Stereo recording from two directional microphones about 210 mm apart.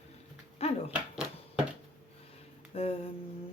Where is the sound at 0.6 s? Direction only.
30° left (ahead or behind).